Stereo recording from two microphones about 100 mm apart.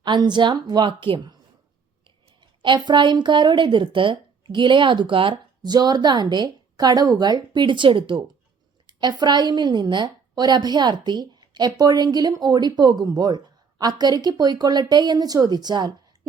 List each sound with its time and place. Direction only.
0.0 s a woman's voice: 50° right (ahead or behind)
2.4 s a woman's voice: 50° right (ahead or behind)
5.6 s a woman's voice: 45° right (ahead or behind)
8.9 s a woman's voice: 45° right (ahead or behind)